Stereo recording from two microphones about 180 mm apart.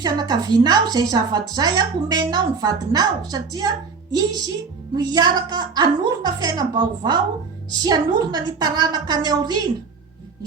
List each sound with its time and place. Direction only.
0.0 s a woman's voice: 20° right (ahead or behind)
4.9 s a woman's voice: 25° right (ahead or behind)